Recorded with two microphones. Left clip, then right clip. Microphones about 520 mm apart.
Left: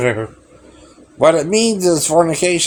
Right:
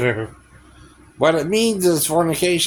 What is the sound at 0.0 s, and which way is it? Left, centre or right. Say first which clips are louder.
Speech: left 3 dB; right.